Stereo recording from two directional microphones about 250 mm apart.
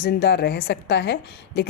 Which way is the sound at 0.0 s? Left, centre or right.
Left.